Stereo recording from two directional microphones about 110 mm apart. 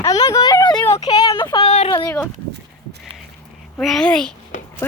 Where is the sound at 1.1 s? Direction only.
40° left (ahead or behind).